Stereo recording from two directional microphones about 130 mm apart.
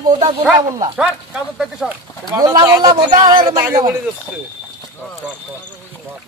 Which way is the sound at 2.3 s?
30° right (ahead or behind).